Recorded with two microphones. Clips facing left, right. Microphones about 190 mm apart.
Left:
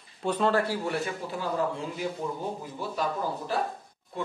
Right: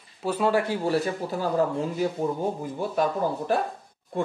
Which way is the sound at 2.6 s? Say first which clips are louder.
Right 6 dB; 50° right (ahead or behind).